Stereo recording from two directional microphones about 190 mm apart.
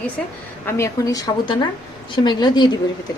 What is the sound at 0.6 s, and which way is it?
A woman's voice, 15° left (ahead or behind).